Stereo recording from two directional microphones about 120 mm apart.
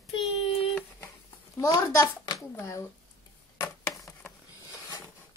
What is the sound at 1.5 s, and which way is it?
Speech, 30° left (ahead or behind).